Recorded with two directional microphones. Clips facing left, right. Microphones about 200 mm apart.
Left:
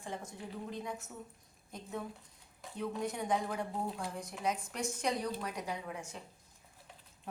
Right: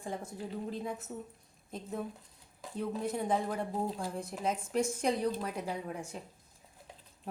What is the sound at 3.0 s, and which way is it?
A woman's voice, 30° right (ahead or behind).